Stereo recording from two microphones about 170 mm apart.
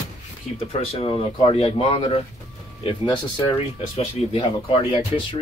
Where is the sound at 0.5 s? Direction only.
35° left (ahead or behind).